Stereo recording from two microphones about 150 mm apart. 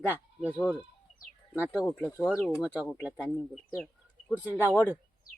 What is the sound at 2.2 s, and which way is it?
Speech, 5° right (ahead or behind).